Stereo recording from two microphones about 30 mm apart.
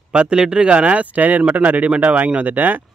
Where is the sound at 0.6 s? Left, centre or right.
Right.